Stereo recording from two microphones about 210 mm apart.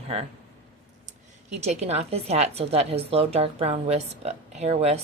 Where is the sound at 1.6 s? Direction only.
30° right (ahead or behind).